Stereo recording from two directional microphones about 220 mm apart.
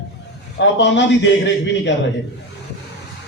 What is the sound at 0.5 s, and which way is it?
A man's voice, 55° left (ahead or behind).